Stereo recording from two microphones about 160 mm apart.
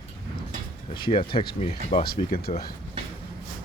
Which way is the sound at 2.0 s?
65° left (ahead or behind).